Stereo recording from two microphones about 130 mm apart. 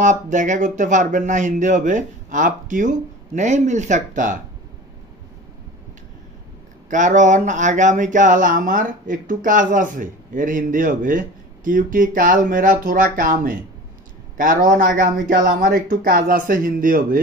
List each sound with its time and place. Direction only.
0.0 s speech: 70° right (ahead or behind)
6.9 s speech: 75° right (ahead or behind); by 17.2 s 90° right